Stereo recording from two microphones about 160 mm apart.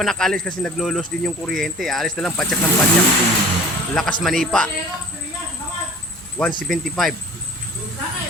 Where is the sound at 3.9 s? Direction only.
5° left (ahead or behind).